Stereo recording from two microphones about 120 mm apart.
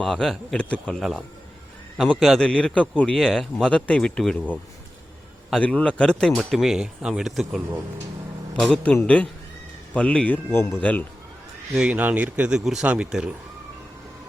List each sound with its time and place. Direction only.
0.0 s speech: 5° left (ahead or behind)
11.7 s speech: 10° right (ahead or behind)